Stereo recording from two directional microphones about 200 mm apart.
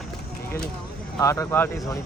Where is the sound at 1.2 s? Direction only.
15° left (ahead or behind).